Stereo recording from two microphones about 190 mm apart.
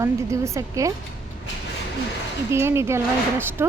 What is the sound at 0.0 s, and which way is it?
Speech, 15° right (ahead or behind).